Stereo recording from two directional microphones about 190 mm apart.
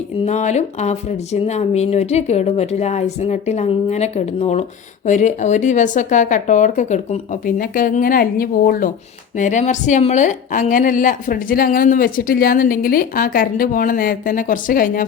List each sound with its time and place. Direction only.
0.3 s a woman's voice: 40° left (ahead or behind)